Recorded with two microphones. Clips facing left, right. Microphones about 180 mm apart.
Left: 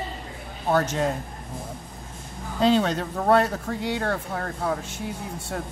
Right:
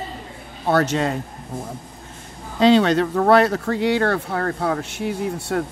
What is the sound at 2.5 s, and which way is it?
Speech, 80° right.